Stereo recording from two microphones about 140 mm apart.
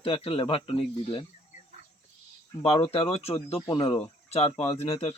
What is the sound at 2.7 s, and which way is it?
Speech, 45° left (ahead or behind).